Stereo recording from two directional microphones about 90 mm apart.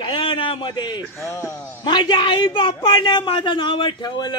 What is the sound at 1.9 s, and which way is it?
A man's voice, 60° left (ahead or behind).